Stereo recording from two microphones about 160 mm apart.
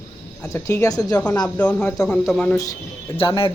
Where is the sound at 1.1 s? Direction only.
10° left (ahead or behind).